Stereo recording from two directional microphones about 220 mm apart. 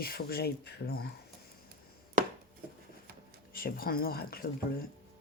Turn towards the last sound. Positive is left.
turn(degrees=45)  # may be behind; listen again after turning